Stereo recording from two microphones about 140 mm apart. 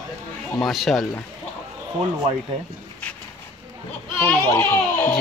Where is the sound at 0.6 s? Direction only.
Centre (ahead or behind).